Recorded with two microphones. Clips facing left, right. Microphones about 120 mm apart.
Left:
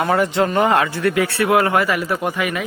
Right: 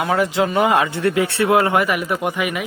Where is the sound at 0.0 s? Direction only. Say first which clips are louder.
Left 1 dB; centre (ahead or behind).